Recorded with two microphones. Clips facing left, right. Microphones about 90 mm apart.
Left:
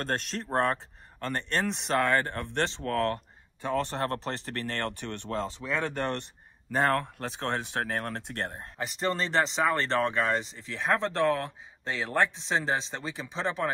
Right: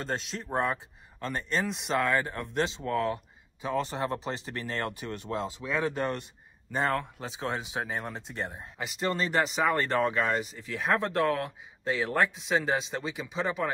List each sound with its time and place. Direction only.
0.0 s speech: centre (ahead or behind)
8.9 s speech: 35° left (ahead or behind)
9.6 s speech: 10° right (ahead or behind)
10.4 s speech: 25° left (ahead or behind)
10.9 s speech: 15° right (ahead or behind)